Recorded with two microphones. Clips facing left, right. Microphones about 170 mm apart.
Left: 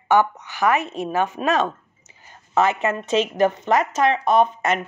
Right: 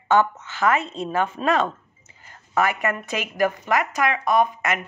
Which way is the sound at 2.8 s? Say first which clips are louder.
Left 5 dB; 25° left (ahead or behind).